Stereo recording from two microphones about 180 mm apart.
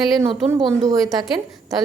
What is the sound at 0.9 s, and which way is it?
Speech, 20° right (ahead or behind).